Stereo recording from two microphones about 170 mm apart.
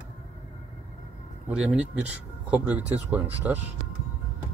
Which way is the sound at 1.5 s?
5° right (ahead or behind).